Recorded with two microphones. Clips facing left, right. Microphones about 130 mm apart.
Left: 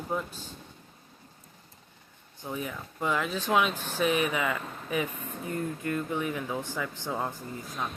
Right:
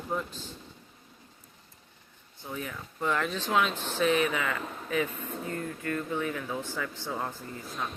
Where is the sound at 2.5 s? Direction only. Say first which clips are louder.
Left 2 dB; 15° left (ahead or behind).